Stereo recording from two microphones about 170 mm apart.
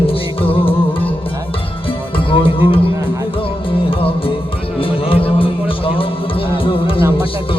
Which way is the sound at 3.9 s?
30° left (ahead or behind).